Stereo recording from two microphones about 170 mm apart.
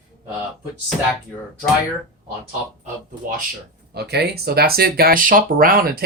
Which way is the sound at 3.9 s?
75° right (ahead or behind).